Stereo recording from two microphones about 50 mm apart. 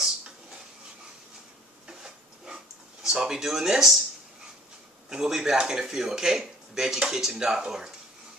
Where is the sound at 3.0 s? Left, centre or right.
Centre.